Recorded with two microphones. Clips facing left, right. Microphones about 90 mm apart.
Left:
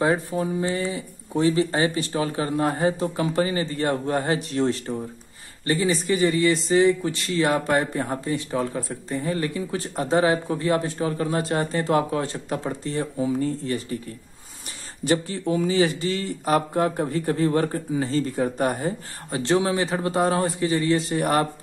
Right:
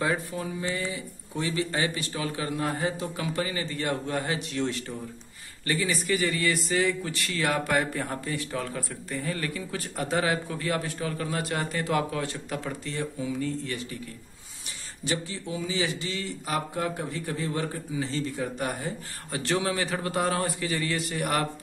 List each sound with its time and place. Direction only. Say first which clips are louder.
0.0 s speech: left 6 dB; 30° left (ahead or behind)
15.0 s speech: left 9 dB; 50° left (ahead or behind)
19.3 s speech: left 6 dB; 25° left (ahead or behind)